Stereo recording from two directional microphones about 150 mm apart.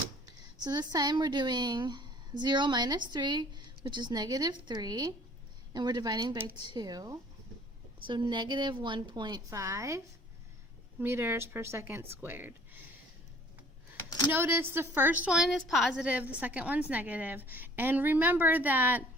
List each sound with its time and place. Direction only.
0.6 s a woman's voice: 25° right (ahead or behind)
11.0 s a woman's voice: 15° right (ahead or behind)
14.3 s a woman's voice: 15° right (ahead or behind)